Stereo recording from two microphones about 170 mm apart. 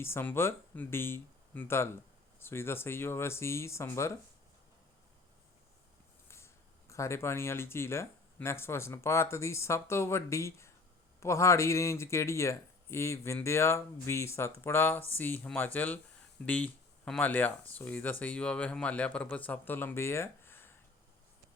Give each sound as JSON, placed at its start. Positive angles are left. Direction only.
{"t": 0.0, "sound": "speech", "side_deg": 15}
{"t": 6.2, "sound": "speech", "side_deg": 15}